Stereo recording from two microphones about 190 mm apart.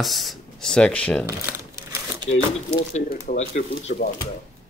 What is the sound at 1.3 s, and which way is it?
Crumpling, 15° right (ahead or behind).